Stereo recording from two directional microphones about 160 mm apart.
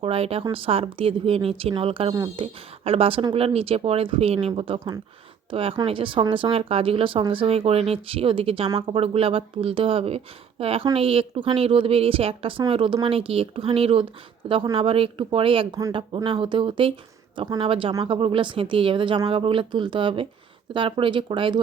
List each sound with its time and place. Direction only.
0.0 s speech: 35° right (ahead or behind)
2.1 s speech: 25° right (ahead or behind)
2.4 s speech: 35° right (ahead or behind)